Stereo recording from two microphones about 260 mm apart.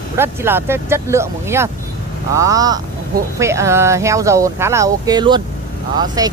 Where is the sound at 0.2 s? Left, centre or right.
Centre.